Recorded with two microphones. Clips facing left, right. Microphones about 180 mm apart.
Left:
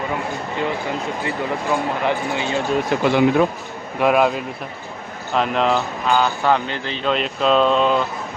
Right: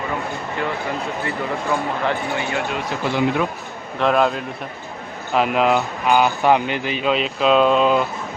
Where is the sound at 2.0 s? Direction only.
20° left (ahead or behind).